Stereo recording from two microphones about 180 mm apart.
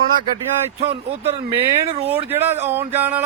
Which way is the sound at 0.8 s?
30° right (ahead or behind).